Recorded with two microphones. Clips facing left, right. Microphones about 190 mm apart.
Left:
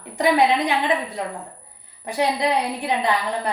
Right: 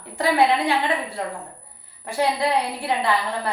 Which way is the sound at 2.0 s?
20° left (ahead or behind).